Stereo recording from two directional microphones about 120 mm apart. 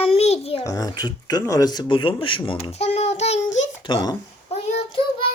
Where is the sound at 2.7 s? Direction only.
65° left (ahead or behind).